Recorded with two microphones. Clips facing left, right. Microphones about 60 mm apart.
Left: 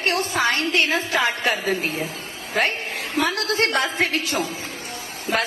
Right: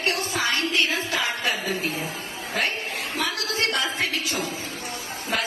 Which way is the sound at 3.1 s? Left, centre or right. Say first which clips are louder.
Left 7 dB; left.